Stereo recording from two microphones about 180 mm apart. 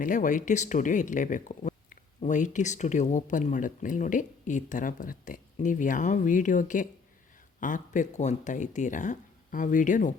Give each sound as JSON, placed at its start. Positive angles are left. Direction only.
{"t": 0.0, "sound": "speech", "side_deg": 45}